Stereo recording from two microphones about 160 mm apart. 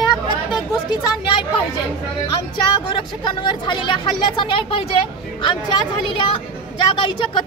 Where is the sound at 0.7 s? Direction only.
30° left (ahead or behind).